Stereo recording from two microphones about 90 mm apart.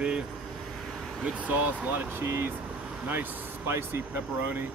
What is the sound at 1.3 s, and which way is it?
Speech, 15° right (ahead or behind).